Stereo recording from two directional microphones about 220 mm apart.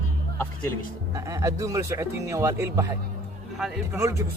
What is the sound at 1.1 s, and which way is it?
Speech, 15° right (ahead or behind).